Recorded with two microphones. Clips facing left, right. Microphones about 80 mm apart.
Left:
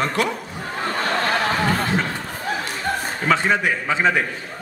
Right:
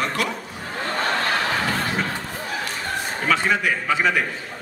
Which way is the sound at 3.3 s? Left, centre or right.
Left.